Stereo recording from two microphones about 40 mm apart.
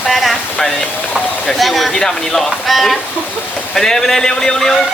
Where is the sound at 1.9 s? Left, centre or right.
Centre.